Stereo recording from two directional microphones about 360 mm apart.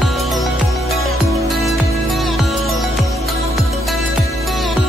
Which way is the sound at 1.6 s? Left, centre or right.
Centre.